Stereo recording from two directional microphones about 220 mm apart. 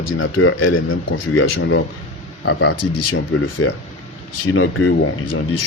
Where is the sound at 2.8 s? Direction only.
90° left.